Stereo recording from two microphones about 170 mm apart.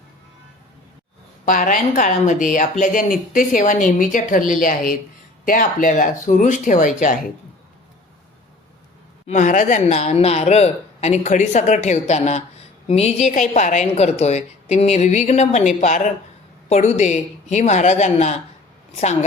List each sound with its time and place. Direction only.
1.5 s a woman's voice: 50° left (ahead or behind)
9.2 s a woman's voice: 45° left (ahead or behind)